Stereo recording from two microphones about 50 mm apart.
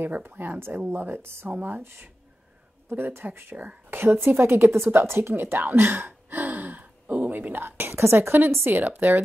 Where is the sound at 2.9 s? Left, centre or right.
Right.